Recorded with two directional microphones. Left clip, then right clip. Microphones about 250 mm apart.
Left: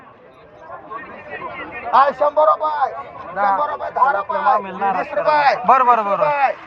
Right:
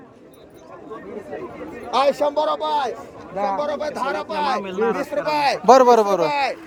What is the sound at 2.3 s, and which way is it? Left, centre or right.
Speech, right.